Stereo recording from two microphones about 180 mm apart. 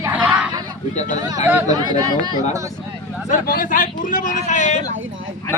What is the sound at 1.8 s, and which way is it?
Speech, 25° right (ahead or behind).